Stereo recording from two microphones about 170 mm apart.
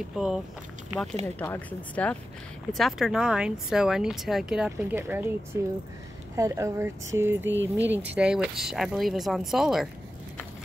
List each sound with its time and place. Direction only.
0.1 s speech: 5° right (ahead or behind)
1.2 s speech: 10° left (ahead or behind)